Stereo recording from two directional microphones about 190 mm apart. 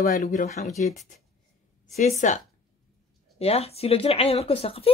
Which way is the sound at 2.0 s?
40° left (ahead or behind).